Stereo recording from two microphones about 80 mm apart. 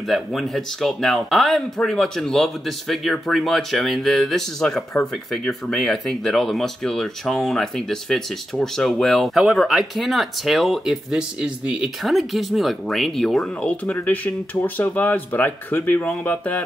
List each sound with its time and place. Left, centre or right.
0.0 s speech: centre
12.0 s speech: centre
13.6 s music: centre
13.9 s speech: left
16.3 s music: centre